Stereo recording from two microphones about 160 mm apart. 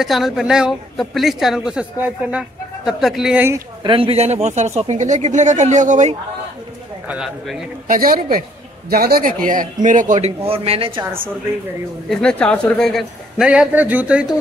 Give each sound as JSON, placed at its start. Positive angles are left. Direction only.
{"t": 0.0, "sound": "a woman's voice", "side_deg": 0}
{"t": 3.8, "sound": "speech", "side_deg": -30}
{"t": 7.1, "sound": "a woman's voice", "side_deg": -5}
{"t": 7.9, "sound": "a man's voice", "side_deg": -65}
{"t": 10.4, "sound": "speech", "side_deg": -35}
{"t": 12.1, "sound": "a woman's voice", "side_deg": 5}